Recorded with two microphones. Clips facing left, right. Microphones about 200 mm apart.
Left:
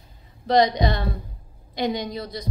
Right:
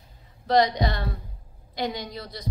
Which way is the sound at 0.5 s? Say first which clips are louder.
Left 2 dB; 20° left (ahead or behind).